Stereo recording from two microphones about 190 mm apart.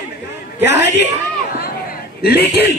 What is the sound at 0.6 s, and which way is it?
Speech, 65° left (ahead or behind).